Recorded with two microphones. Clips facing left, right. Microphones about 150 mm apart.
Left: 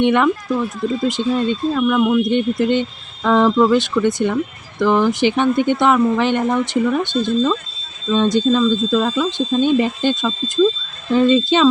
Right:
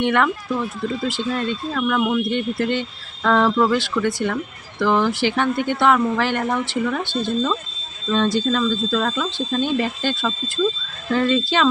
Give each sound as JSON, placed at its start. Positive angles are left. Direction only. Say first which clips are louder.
{"t": 0.0, "sound": "speech", "louder": "left 4 dB", "side_deg": 20}